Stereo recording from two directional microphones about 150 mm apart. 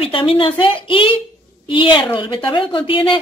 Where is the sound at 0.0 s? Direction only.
35° left (ahead or behind).